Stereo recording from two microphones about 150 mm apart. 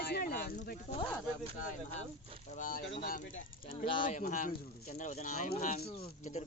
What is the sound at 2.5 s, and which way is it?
Speech, 60° left (ahead or behind).